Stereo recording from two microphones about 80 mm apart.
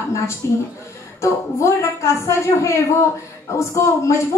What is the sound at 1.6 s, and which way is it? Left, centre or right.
A woman's voice, left.